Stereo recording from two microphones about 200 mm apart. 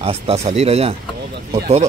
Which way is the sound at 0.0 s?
30° right (ahead or behind).